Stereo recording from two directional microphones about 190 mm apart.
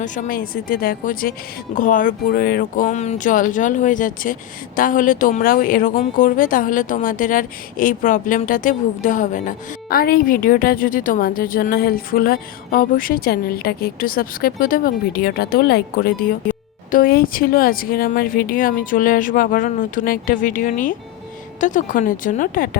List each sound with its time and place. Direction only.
0.0 s speech: 40° left (ahead or behind)